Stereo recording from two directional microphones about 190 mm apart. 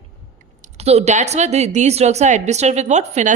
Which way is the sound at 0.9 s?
35° right (ahead or behind).